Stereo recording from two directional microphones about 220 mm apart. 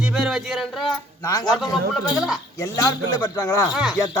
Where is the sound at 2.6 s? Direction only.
15° left (ahead or behind).